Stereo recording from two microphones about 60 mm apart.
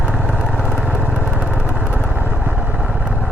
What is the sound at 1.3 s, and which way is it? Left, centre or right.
Vehicle, centre.